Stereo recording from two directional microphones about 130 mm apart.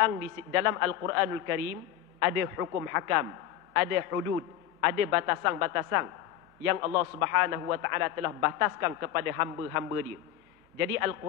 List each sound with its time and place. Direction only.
0.0 s a man's voice: 20° right (ahead or behind)